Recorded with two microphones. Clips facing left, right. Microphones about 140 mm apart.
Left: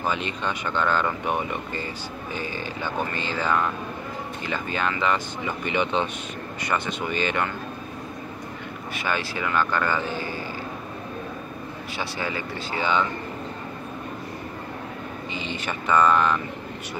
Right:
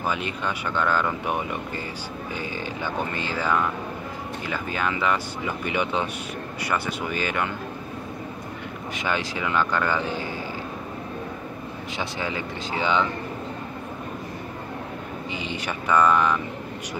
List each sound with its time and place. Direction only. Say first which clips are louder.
0.0 s speech: even; 10° right (ahead or behind)
8.9 s speech: even; 15° right (ahead or behind)
12.0 s speech: even; 15° right (ahead or behind)
15.3 s speech: even; 15° right (ahead or behind)